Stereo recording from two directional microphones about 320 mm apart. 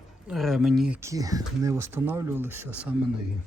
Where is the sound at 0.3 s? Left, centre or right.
Centre.